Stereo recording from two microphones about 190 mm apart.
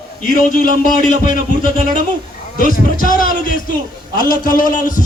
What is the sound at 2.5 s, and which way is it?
A man's voice, 45° left (ahead or behind).